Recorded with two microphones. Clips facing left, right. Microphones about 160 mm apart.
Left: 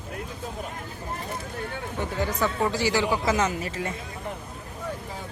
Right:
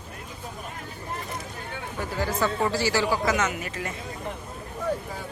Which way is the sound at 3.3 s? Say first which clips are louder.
Left 1 dB; 30° left (ahead or behind).